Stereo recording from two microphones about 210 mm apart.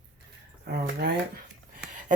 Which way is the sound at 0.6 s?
50° right (ahead or behind).